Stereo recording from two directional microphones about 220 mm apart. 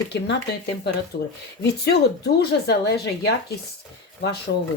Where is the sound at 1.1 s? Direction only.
40° left (ahead or behind).